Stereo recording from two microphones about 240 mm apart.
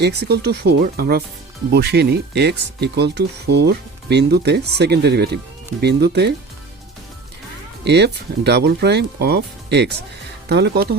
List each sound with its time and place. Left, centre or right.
0.0 s speech: right
7.9 s speech: right